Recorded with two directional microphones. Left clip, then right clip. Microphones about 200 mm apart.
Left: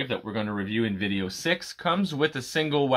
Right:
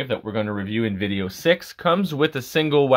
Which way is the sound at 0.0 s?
40° right (ahead or behind).